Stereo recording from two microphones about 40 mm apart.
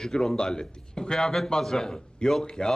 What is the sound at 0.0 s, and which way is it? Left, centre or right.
A man's voice, centre.